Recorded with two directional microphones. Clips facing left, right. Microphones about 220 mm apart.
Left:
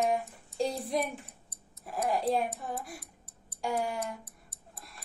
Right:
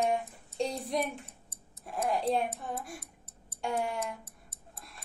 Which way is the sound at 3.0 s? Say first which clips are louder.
Even; 25° right (ahead or behind).